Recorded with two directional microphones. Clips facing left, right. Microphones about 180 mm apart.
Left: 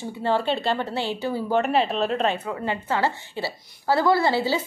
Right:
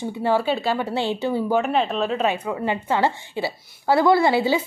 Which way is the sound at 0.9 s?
20° right (ahead or behind).